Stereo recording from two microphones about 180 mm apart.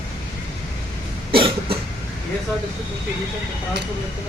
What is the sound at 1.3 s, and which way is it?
Cough, 30° right (ahead or behind).